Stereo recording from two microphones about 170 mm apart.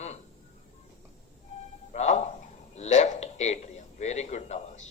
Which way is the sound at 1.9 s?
45° left (ahead or behind).